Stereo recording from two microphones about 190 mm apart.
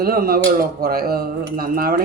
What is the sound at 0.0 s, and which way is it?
Speech, 55° right (ahead or behind).